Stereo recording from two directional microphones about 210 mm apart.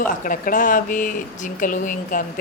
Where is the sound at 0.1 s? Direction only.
40° left (ahead or behind).